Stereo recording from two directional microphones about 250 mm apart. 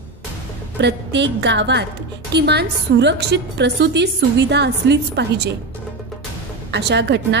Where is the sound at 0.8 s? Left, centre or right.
Right.